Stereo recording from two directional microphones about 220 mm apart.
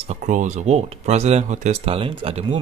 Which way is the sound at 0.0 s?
30° right (ahead or behind).